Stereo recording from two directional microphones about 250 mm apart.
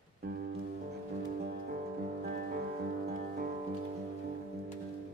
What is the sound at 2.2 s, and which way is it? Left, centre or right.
Music, right.